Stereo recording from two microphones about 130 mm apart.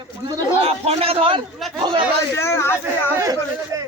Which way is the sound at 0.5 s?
50° right (ahead or behind).